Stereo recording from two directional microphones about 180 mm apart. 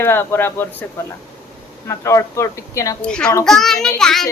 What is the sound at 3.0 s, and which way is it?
Child singing, 5° left (ahead or behind).